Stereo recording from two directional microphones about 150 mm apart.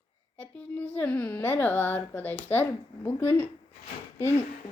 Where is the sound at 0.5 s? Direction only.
10° left (ahead or behind).